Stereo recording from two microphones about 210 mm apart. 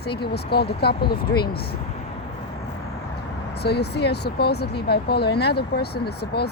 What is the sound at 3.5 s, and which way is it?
Speech, 50° left (ahead or behind).